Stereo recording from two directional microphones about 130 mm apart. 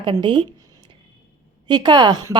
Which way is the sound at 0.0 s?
40° right (ahead or behind).